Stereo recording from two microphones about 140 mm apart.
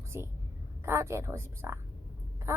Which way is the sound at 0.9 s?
20° right (ahead or behind).